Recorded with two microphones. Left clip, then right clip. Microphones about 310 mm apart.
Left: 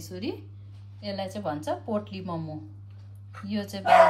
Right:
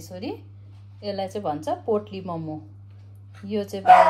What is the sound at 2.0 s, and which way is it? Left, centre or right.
Dishes, centre.